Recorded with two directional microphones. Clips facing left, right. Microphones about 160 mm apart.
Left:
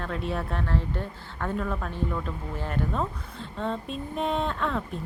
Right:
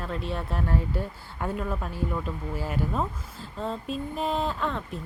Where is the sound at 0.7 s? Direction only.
10° right (ahead or behind).